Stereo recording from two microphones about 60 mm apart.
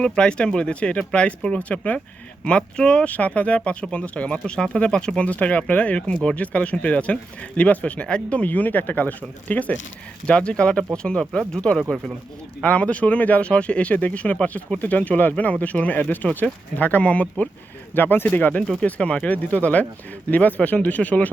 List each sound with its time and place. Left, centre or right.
0.0 s speech: centre
17.9 s speech: left
18.9 s speech: centre